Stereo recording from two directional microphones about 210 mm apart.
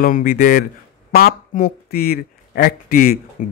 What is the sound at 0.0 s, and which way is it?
A man's voice, 45° left (ahead or behind).